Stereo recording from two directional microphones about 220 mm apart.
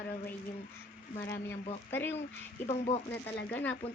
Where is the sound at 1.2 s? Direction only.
10° left (ahead or behind).